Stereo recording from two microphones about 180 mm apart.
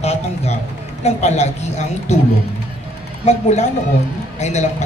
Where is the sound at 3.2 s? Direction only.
40° left (ahead or behind).